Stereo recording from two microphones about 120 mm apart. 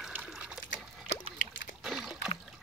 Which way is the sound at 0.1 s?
15° right (ahead or behind).